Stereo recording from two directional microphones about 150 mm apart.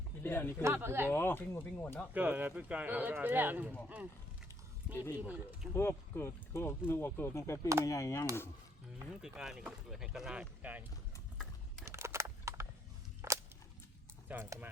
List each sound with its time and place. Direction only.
0.2 s a sound: 15° left (ahead or behind)
0.6 s speech: 15° right (ahead or behind)
1.1 s speech: 15° left (ahead or behind)
2.1 s speech: 10° right (ahead or behind)
5.2 s speech: 10° right (ahead or behind)
5.7 s speech: 15° left (ahead or behind)
9.0 s speech: 5° right (ahead or behind)
11.9 s a sound: 20° right (ahead or behind)
14.3 s speech: 10° right (ahead or behind)